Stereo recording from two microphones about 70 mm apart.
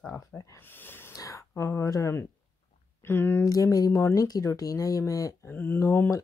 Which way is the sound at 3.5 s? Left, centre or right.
Left.